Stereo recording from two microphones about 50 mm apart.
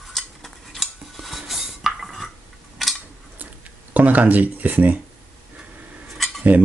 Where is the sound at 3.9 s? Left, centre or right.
Right.